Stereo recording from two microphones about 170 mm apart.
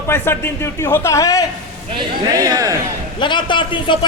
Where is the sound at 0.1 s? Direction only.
15° left (ahead or behind).